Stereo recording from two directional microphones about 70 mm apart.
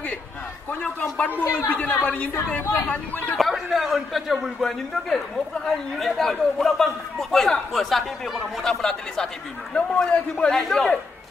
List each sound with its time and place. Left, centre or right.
1.0 s a man's voice: centre
1.7 s speech: left
3.3 s a man's voice: centre